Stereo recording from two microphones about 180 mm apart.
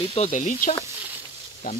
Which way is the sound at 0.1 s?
40° left (ahead or behind).